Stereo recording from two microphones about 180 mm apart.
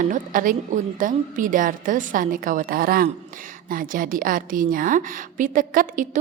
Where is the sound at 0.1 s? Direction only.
50° right (ahead or behind).